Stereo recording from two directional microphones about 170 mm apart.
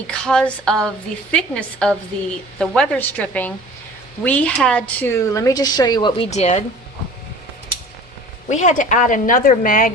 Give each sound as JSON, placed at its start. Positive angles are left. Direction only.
{"t": 0.1, "sound": "a sound", "side_deg": 5}
{"t": 2.6, "sound": "a woman's voice", "side_deg": 5}
{"t": 6.3, "sound": "speech", "side_deg": 40}
{"t": 8.4, "sound": "a woman's voice", "side_deg": 45}